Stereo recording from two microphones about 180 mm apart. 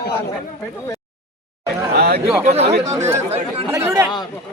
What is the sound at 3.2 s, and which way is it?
Speech, 35° right (ahead or behind).